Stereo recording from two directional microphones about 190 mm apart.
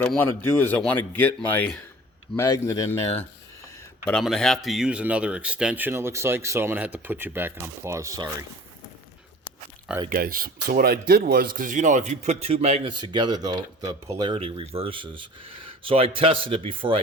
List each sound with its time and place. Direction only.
0.0 s a man's voice: 10° left (ahead or behind)
4.0 s speech: centre (ahead or behind); by 8.4 s 15° right (ahead or behind)
10.1 s speech: 50° right (ahead or behind); by 17.0 s 30° right (ahead or behind)